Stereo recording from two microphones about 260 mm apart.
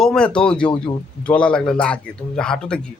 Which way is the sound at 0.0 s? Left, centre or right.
Centre.